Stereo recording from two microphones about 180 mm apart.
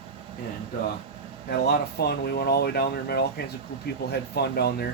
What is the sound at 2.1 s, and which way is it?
Speech, 65° left (ahead or behind).